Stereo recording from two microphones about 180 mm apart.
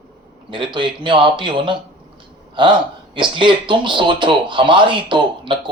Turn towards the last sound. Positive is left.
turn(degrees=-25)  # may be behind; listen again after turning